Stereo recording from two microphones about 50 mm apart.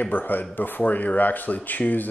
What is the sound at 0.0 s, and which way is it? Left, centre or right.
Speech, left.